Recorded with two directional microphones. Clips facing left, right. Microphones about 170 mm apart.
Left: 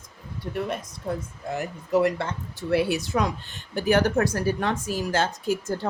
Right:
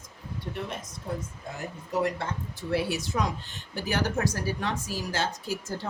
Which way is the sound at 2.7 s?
60° left (ahead or behind).